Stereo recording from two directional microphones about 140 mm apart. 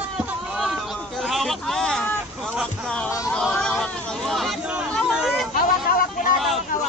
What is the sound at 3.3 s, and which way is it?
Hubbub, 5° left (ahead or behind).